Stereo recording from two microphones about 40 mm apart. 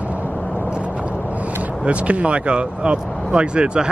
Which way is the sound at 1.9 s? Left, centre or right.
Right.